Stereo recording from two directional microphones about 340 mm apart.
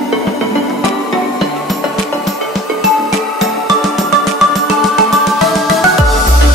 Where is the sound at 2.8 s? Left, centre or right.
Centre.